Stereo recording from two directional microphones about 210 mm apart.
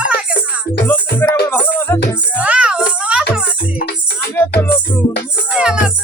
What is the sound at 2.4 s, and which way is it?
Music, 5° right (ahead or behind).